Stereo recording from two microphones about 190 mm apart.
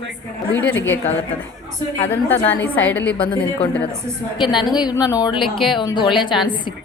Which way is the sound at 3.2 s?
30° left (ahead or behind).